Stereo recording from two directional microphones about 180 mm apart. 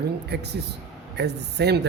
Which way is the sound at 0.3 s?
65° right (ahead or behind).